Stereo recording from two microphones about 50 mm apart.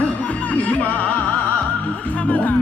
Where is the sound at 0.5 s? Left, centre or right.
Left.